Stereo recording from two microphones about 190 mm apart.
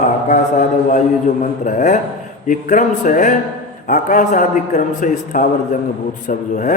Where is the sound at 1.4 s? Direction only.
40° left (ahead or behind).